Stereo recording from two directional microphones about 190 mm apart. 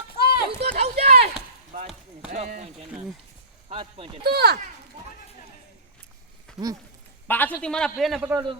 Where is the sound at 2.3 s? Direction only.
40° right (ahead or behind).